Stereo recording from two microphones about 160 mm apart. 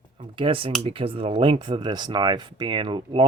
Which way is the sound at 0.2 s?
30° right (ahead or behind).